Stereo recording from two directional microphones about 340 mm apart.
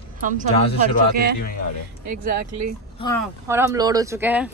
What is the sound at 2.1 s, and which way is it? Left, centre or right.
Speech, right.